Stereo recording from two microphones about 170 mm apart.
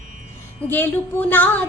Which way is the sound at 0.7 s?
10° left (ahead or behind).